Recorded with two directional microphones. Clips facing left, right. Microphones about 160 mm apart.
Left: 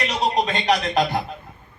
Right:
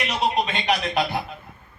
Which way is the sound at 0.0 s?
35° left (ahead or behind).